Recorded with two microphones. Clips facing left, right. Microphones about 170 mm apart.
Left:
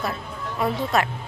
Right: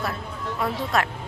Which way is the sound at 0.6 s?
Centre (ahead or behind).